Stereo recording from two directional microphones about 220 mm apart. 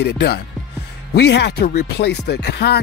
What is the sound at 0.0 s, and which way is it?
Speech, 50° left (ahead or behind).